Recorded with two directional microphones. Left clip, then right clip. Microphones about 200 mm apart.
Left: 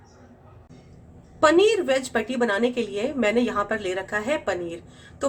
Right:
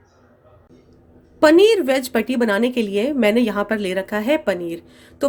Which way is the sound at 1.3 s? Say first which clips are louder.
Right 5 dB; 35° right (ahead or behind).